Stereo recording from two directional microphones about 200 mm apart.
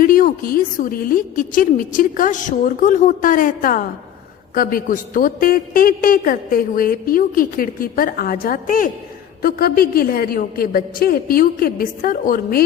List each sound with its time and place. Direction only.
0.0 s a man's voice: 45° left (ahead or behind)